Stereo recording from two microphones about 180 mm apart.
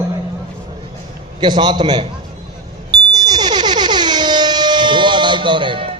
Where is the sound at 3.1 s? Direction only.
20° right (ahead or behind).